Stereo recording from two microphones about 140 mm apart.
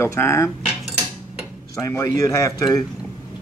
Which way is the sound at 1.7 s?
20° left (ahead or behind).